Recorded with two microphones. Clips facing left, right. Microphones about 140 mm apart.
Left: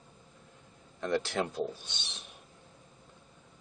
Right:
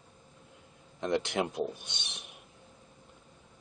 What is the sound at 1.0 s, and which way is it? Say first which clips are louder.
Speech: right 1 dB; 20° right (ahead or behind).